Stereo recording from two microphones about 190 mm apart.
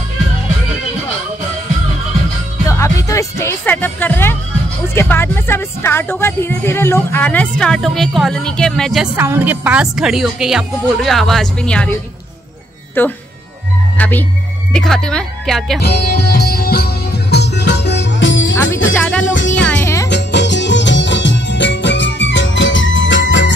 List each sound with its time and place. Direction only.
2.6 s speech: 15° left (ahead or behind)
13.0 s music: 10° left (ahead or behind)
13.9 s speech: 10° left (ahead or behind)
15.8 s music: 60° left (ahead or behind); by 18.6 s 80° left
18.9 s music: 10° left (ahead or behind)
19.2 s music: 80° left
19.8 s music: 15° left (ahead or behind)
20.1 s music: 65° left (ahead or behind)